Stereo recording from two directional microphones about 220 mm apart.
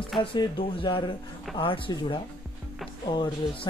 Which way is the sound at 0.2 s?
25° left (ahead or behind).